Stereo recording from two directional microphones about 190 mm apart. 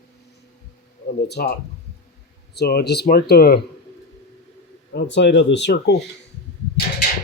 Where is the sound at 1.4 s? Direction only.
50° left (ahead or behind).